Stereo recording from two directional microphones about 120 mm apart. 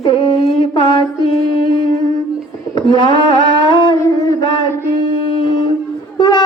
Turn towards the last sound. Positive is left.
turn(degrees=40)  # may be behind; listen again after turning